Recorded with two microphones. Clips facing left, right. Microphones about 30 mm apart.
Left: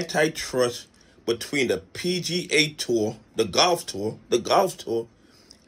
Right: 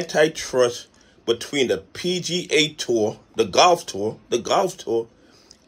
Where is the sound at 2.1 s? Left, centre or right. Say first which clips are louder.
Right 2 dB; left.